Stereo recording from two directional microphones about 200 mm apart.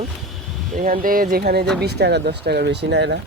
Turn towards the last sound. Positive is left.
turn(degrees=-60)  # may be behind; listen again after turning